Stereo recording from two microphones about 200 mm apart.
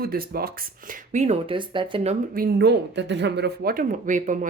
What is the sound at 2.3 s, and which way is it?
Speech, 50° right (ahead or behind).